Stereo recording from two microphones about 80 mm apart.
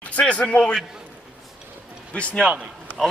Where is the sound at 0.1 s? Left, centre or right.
Centre.